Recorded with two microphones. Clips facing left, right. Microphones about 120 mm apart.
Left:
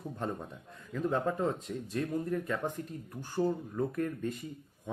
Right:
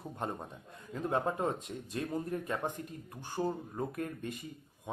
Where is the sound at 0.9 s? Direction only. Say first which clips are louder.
Left 2 dB; 25° right (ahead or behind).